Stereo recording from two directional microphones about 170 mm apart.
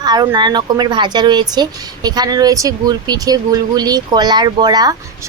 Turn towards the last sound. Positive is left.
turn(degrees=-25)  # may be behind; listen again after turning